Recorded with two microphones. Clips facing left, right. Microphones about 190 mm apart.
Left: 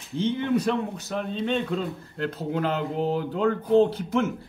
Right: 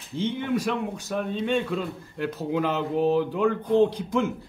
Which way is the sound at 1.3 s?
10° right (ahead or behind).